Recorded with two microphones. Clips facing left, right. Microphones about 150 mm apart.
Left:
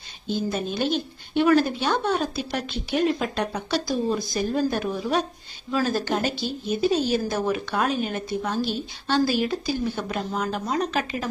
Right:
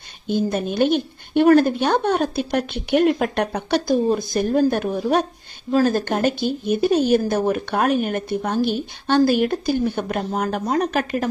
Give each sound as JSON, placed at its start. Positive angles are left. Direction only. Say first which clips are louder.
{"t": 0.3, "sound": "speech", "louder": "right 5 dB", "side_deg": -55}